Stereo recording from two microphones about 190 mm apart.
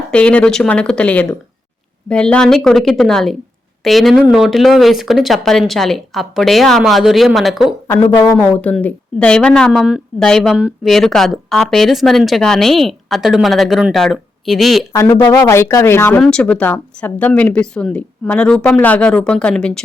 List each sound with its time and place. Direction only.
0.1 s a woman's voice: 5° left (ahead or behind)
7.9 s a woman's voice: 15° left (ahead or behind); by 14.8 s centre (ahead or behind)
15.3 s a woman's voice: 15° left (ahead or behind)